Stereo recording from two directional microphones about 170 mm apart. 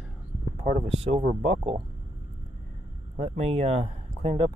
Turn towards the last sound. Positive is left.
turn(degrees=-35)  # may be behind; listen again after turning